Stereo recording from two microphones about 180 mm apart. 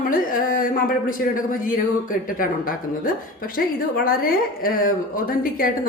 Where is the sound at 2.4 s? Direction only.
50° left (ahead or behind).